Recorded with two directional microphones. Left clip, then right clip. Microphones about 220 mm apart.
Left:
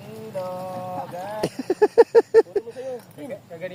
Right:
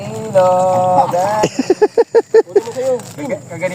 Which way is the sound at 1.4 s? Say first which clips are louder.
Right 8 dB; centre (ahead or behind).